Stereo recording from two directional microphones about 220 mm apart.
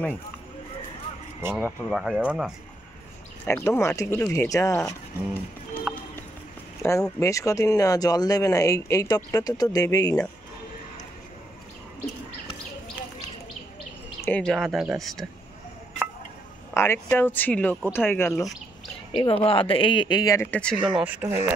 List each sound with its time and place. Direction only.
1.4 s speech: 10° right (ahead or behind)
3.4 s speech: 10° left (ahead or behind)
6.8 s speech: 15° left (ahead or behind)
14.2 s speech: 5° left (ahead or behind)
16.7 s speech: 10° left (ahead or behind)
19.1 s speech: 25° left (ahead or behind); by 20.7 s 10° left (ahead or behind)
20.8 s speech: 5° right (ahead or behind)